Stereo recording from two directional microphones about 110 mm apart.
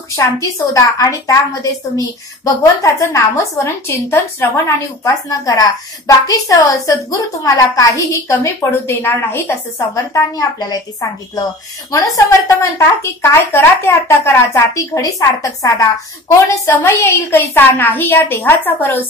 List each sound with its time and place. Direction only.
0.1 s a woman's voice: 30° left (ahead or behind)
10.3 s a woman's voice: 35° left (ahead or behind)
12.3 s a woman's voice: 30° left (ahead or behind)